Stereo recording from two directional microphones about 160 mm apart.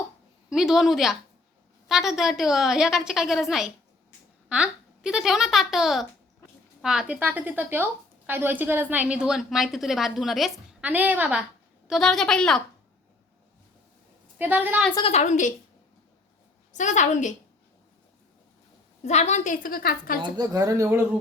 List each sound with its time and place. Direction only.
0.5 s a woman's voice: centre (ahead or behind)
11.9 s a woman's voice: centre (ahead or behind)
14.3 s a woman's voice: 10° right (ahead or behind)
15.0 s a woman's voice: 45° left (ahead or behind)
16.7 s a woman's voice: 50° left (ahead or behind)
19.0 s a woman's voice: 45° left (ahead or behind); by 20.1 s 65° left (ahead or behind)
20.2 s speech: 25° right (ahead or behind)